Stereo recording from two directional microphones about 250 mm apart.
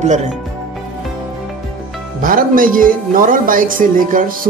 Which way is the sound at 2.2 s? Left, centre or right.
Right.